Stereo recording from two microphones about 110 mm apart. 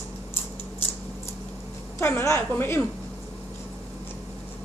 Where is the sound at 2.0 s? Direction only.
20° left (ahead or behind).